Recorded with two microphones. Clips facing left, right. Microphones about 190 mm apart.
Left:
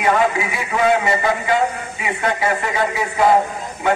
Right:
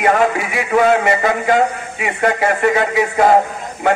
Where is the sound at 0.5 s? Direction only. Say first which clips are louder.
Right 4 dB; 50° right (ahead or behind).